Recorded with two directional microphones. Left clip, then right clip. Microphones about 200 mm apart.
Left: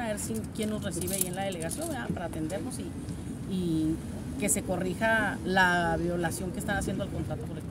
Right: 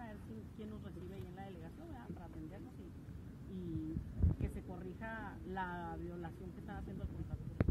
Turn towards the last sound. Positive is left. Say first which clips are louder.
# left 19 dB
turn(degrees=15)  # may be behind; listen again after turning